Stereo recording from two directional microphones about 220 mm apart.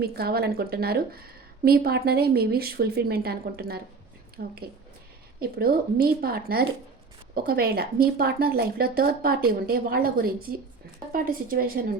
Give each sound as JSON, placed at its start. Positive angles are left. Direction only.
{"t": 0.0, "sound": "a woman's voice", "side_deg": -45}